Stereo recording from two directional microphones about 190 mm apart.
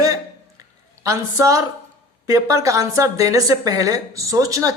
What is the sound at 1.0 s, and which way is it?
A woman's voice, 15° right (ahead or behind).